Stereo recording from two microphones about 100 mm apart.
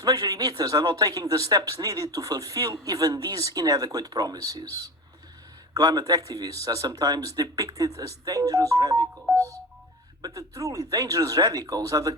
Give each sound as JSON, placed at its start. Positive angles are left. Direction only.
{"t": 0.0, "sound": "speech", "side_deg": -40}
{"t": 5.7, "sound": "speech", "side_deg": -40}
{"t": 10.2, "sound": "speech", "side_deg": -35}